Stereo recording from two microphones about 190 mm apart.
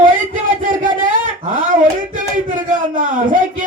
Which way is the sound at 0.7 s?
45° right (ahead or behind).